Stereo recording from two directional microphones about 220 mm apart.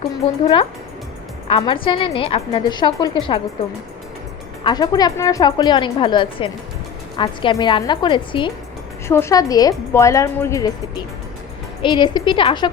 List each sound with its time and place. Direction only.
0.4 s a woman's voice: 25° left (ahead or behind)
4.6 s a woman's voice: 20° left (ahead or behind)
9.0 s a woman's voice: 10° left (ahead or behind)